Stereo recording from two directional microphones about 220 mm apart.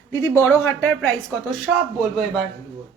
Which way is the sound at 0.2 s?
10° left (ahead or behind).